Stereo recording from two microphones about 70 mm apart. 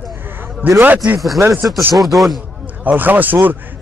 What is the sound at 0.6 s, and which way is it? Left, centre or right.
Speech, right.